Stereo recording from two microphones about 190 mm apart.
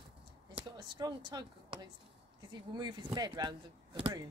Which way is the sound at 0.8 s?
20° right (ahead or behind).